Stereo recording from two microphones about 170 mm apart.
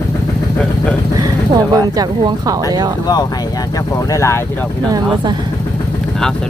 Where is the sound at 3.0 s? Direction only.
25° left (ahead or behind).